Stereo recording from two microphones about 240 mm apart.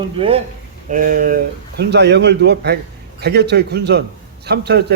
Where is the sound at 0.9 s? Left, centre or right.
Right.